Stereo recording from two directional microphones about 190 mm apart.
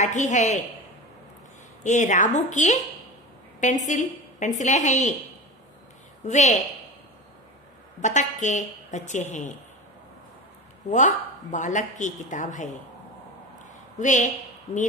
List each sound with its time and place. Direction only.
0.0 s a woman's voice: 40° left (ahead or behind)
1.8 s a woman's voice: 40° left (ahead or behind)
6.2 s a woman's voice: 40° left (ahead or behind)
8.0 s a woman's voice: 40° left (ahead or behind)
10.9 s a woman's voice: 40° left (ahead or behind)
13.9 s a woman's voice: 40° left (ahead or behind)